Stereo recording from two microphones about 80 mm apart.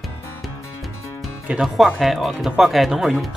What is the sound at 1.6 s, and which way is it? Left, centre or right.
Speech, centre.